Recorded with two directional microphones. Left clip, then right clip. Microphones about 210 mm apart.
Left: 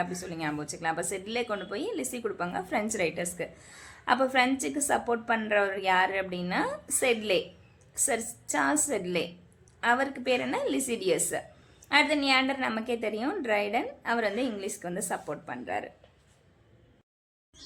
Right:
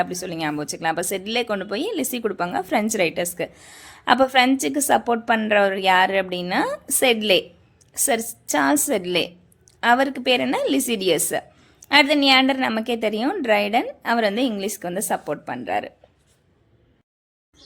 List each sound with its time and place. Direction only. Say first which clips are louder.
0.0 s a woman's voice: right 8 dB; 40° right (ahead or behind)